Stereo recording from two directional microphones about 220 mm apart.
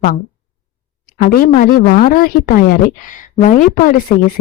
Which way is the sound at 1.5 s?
35° left (ahead or behind).